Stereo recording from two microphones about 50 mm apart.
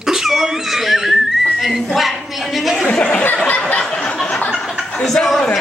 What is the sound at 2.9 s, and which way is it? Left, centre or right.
Speech, left.